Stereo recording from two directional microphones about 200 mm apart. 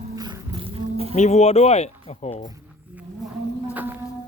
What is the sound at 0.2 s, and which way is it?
Livestock, 25° right (ahead or behind).